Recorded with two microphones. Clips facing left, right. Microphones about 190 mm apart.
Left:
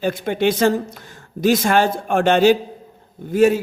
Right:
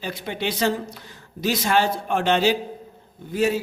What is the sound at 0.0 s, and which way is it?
A man's voice, 50° left (ahead or behind).